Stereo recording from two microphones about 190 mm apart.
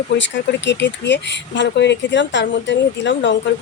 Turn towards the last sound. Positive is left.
turn(degrees=75)  # may be behind; listen again after turning